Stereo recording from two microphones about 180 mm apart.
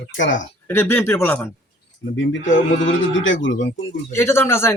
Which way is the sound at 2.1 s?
90° left.